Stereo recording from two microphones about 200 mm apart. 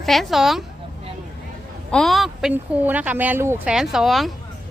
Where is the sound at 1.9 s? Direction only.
Centre (ahead or behind).